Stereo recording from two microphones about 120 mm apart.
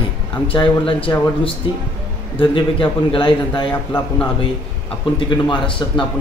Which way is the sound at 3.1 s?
45° left (ahead or behind).